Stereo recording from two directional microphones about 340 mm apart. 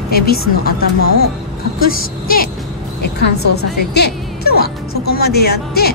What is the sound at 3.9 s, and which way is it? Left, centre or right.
Music, left.